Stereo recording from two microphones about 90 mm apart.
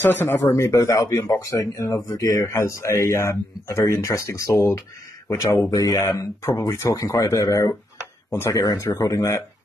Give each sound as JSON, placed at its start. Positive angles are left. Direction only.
{"t": 0.0, "sound": "speech", "side_deg": 25}